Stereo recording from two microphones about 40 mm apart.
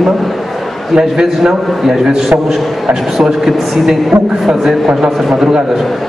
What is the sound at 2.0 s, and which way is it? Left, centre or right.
Speech, centre.